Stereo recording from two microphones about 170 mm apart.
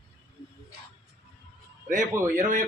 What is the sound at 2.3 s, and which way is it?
Speech, 50° right (ahead or behind).